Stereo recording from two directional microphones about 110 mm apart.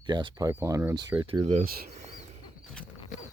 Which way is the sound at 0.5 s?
25° right (ahead or behind).